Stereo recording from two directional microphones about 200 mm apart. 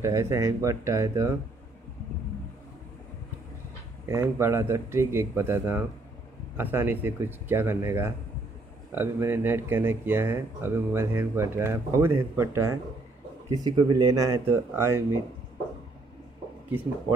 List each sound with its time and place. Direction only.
0.0 s speech: 15° right (ahead or behind)
4.0 s speech: 15° right (ahead or behind)